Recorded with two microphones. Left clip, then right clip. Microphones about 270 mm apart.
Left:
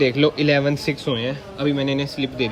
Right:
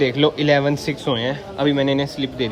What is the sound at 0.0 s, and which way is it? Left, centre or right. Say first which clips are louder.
Speech: even; centre.